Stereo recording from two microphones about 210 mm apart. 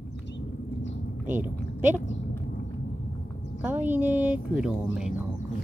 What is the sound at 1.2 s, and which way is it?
Speech, 10° right (ahead or behind).